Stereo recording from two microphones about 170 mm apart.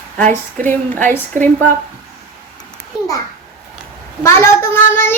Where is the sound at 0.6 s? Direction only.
10° left (ahead or behind).